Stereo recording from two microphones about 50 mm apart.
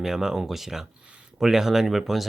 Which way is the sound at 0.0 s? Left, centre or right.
Centre.